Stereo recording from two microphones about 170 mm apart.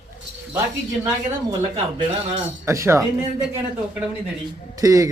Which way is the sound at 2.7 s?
15° right (ahead or behind).